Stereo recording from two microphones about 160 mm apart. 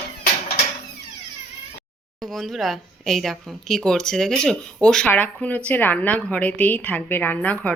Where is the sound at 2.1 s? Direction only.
Centre (ahead or behind).